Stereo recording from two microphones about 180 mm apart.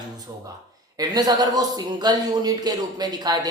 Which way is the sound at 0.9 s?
20° right (ahead or behind).